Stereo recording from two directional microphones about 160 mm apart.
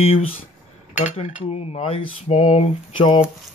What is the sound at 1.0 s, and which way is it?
Cutlery, 40° left (ahead or behind).